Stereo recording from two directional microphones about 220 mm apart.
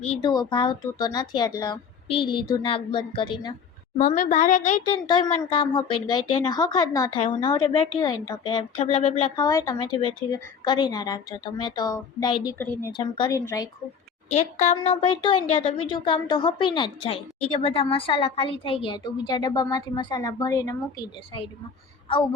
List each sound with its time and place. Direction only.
0.0 s speech: 30° left (ahead or behind)
3.9 s a child's voice: 40° left (ahead or behind)
5.0 s speech: 20° left (ahead or behind)
9.4 s a woman's voice: 15° left (ahead or behind)
14.3 s speech: 30° left (ahead or behind)